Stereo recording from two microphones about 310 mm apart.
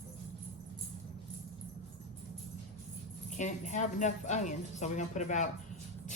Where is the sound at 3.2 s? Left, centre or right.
Left.